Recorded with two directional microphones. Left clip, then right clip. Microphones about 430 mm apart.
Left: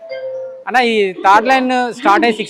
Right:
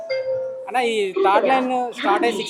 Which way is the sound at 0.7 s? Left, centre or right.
Left.